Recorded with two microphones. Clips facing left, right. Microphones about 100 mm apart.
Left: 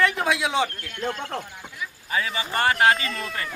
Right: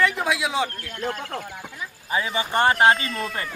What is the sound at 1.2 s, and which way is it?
Speech, 25° left (ahead or behind).